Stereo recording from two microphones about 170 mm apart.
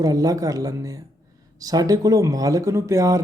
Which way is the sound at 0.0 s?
20° right (ahead or behind).